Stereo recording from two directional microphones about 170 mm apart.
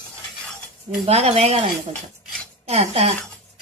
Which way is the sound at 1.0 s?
40° right (ahead or behind).